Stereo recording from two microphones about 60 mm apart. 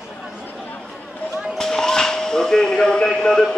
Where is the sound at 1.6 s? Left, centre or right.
Centre.